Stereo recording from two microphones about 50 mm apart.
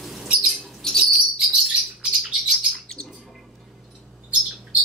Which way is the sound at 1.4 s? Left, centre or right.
Centre.